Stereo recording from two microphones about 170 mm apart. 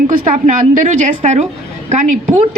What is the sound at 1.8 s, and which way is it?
Speech, 45° right (ahead or behind).